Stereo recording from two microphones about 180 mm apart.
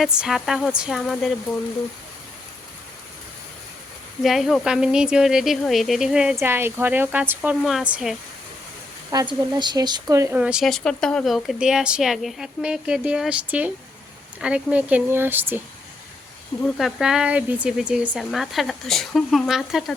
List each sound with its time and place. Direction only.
0.0 s speech: 5° right (ahead or behind)
4.2 s speech: centre (ahead or behind)
9.1 s speech: 25° right (ahead or behind)
16.6 s speech: centre (ahead or behind)